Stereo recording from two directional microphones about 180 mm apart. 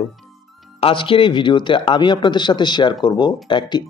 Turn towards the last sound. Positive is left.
turn(degrees=25)  # may be behind; listen again after turning